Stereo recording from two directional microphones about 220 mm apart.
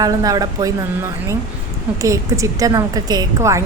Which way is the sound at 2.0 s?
15° right (ahead or behind).